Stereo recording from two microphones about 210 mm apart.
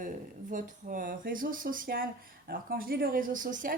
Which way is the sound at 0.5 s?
40° right (ahead or behind).